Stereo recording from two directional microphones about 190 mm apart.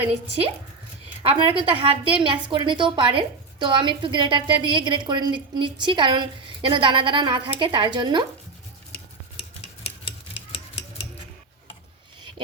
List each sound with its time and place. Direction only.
0.0 s a woman's voice: 30° right (ahead or behind)